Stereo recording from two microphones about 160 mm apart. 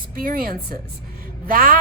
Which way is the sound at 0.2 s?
65° right (ahead or behind).